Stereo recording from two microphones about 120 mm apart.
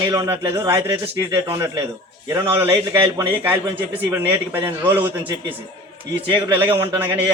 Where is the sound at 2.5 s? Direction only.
20° right (ahead or behind).